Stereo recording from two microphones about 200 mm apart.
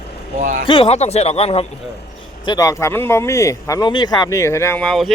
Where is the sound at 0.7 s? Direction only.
30° left (ahead or behind).